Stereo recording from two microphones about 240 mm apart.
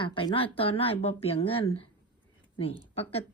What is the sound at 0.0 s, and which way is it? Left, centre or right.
Speech, left.